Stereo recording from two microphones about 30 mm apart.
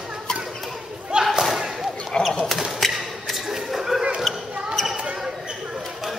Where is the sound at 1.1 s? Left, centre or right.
Right.